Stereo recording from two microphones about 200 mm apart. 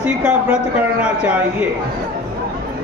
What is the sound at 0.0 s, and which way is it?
A man's voice, 10° right (ahead or behind).